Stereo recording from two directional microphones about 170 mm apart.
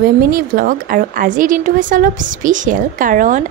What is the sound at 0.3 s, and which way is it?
A woman's voice, 55° right (ahead or behind).